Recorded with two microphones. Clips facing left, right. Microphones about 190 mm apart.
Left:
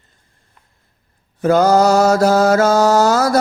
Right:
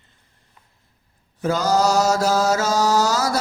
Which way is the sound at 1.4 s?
60° left (ahead or behind).